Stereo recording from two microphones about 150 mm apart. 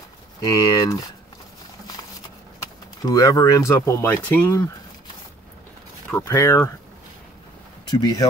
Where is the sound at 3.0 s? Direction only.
25° left (ahead or behind).